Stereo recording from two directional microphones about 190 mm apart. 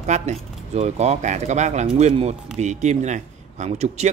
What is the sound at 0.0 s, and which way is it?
Speech, 35° right (ahead or behind).